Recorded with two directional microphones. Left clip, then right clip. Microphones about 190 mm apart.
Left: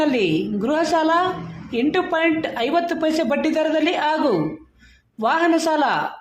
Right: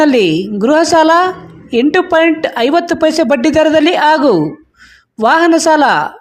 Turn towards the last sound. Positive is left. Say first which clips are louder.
# right 10 dB
turn(degrees=-40)  # may be behind; listen again after turning